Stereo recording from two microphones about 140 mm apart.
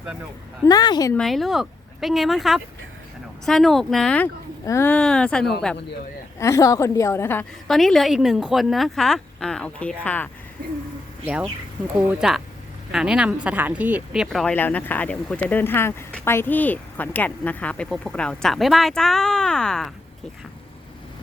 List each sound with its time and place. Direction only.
0.6 s a woman's voice: 25° left (ahead or behind)
1.1 s speech: centre (ahead or behind)
4.6 s speech: 20° left (ahead or behind)
6.4 s a woman's voice: 20° left (ahead or behind)
7.7 s speech: centre (ahead or behind)
11.9 s speech: 5° right (ahead or behind)
14.5 s speech: 10° left (ahead or behind)